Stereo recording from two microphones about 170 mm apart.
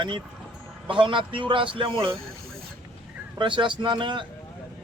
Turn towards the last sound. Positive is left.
turn(degrees=-30)  # may be behind; listen again after turning